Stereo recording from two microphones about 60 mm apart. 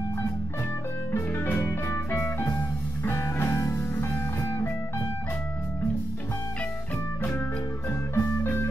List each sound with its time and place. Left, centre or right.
1.1 s music: left
8.1 s organ: left